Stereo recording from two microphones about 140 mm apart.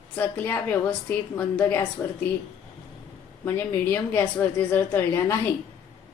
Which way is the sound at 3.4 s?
15° left (ahead or behind).